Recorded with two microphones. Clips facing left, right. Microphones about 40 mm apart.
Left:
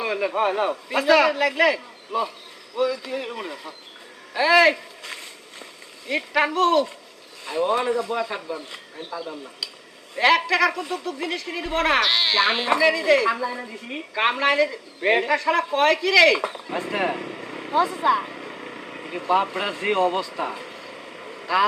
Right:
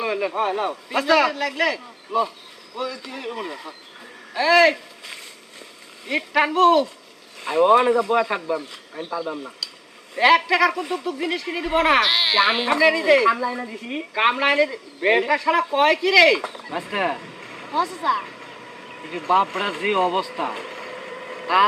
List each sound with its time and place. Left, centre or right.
0.0 s a man's voice: centre
7.4 s speech: right
10.2 s a man's voice: centre
16.4 s speech: centre
16.7 s a man's voice: centre
17.7 s speech: centre
19.1 s speech: centre
21.4 s speech: centre